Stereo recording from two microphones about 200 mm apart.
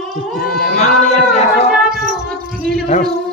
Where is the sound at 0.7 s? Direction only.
35° left (ahead or behind).